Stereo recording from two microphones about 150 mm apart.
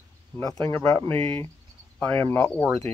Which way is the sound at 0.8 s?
10° left (ahead or behind).